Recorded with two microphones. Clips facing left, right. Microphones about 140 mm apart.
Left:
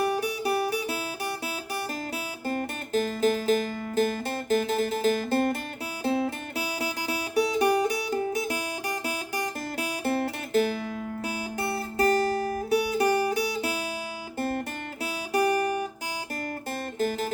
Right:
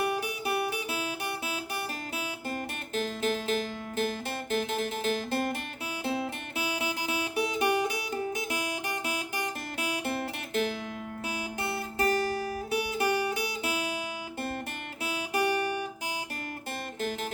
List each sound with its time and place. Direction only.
0.0 s music: 35° left (ahead or behind)
2.5 s music: 40° left (ahead or behind)
15.0 s guitar: 35° left (ahead or behind)
17.0 s music: 40° left (ahead or behind)